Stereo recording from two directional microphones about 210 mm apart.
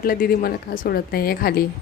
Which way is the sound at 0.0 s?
45° left (ahead or behind).